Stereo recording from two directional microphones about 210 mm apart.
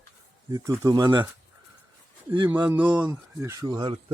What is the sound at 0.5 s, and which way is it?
Speech, 15° right (ahead or behind).